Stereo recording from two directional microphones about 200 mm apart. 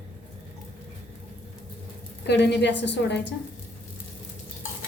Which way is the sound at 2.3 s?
60° left (ahead or behind).